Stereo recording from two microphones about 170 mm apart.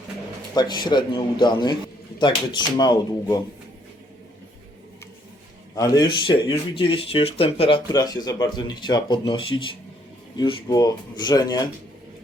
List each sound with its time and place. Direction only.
0.5 s speech: 25° left (ahead or behind)
5.7 s speech: 20° left (ahead or behind)